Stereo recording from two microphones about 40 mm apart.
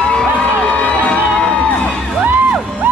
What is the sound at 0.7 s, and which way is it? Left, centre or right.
Music, left.